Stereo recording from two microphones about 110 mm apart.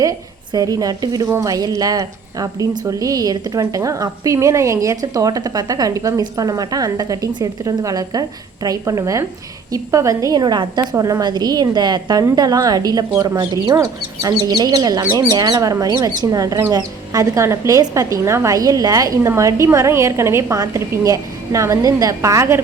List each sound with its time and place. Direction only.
0.0 s a woman's voice: 35° right (ahead or behind)
10.4 s a woman's voice: 40° right (ahead or behind); by 22.6 s 25° right (ahead or behind)